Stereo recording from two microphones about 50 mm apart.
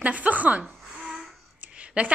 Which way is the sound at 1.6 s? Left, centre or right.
Right.